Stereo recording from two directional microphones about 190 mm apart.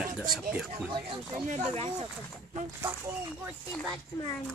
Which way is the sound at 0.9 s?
25° right (ahead or behind).